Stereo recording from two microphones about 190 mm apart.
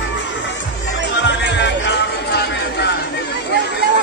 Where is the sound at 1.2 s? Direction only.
65° left (ahead or behind).